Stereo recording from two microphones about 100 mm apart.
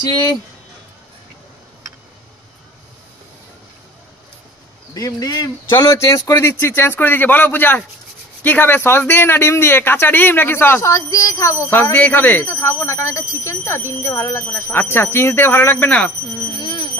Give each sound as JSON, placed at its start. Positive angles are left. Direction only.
{"t": 4.9, "sound": "speech", "side_deg": 40}
{"t": 16.5, "sound": "bell", "side_deg": 50}